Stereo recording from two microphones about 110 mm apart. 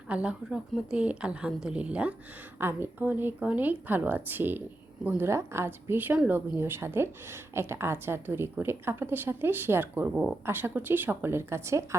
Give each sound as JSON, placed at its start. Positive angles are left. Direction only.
{"t": 0.1, "sound": "a woman's voice", "side_deg": -10}